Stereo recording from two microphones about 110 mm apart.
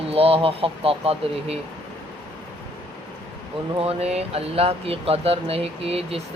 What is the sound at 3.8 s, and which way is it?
Speech, 70° right (ahead or behind).